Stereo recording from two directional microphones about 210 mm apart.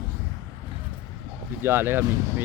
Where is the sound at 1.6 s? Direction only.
10° right (ahead or behind).